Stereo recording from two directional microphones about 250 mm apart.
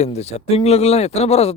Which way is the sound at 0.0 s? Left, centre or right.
Left.